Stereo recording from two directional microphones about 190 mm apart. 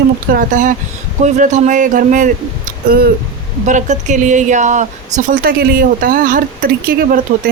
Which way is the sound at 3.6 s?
40° right (ahead or behind).